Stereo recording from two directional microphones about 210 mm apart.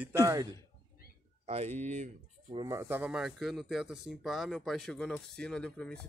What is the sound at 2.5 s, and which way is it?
Speech, 15° right (ahead or behind).